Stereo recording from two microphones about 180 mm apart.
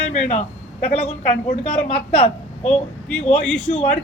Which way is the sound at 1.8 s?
30° left (ahead or behind).